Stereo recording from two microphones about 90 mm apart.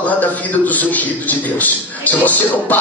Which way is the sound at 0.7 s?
20° left (ahead or behind).